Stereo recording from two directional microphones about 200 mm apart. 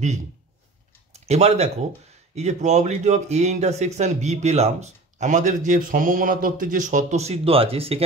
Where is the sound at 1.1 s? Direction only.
35° right (ahead or behind).